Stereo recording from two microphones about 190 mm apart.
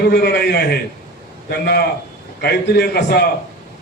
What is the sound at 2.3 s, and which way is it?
Speech, 60° left (ahead or behind).